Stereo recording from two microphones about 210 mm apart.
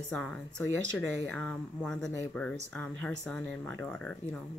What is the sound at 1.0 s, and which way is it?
Speech, 5° left (ahead or behind).